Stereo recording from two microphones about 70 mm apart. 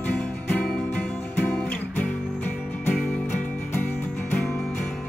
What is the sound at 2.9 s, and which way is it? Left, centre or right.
Music, centre.